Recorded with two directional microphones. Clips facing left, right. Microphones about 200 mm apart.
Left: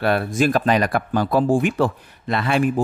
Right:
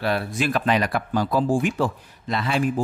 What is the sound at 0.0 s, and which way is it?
Speech, 55° left (ahead or behind).